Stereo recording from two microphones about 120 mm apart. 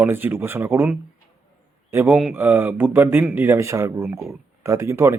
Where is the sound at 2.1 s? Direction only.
5° right (ahead or behind).